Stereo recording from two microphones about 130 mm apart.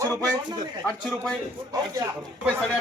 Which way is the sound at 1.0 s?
5° left (ahead or behind).